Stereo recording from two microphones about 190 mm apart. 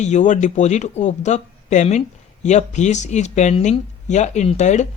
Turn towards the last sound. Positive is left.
turn(degrees=40)  # may be behind; listen again after turning